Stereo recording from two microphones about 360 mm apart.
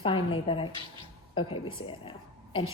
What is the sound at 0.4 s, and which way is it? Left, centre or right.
A woman's voice, centre.